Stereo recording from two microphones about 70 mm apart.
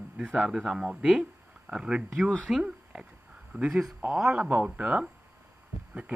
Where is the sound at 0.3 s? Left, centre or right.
Centre.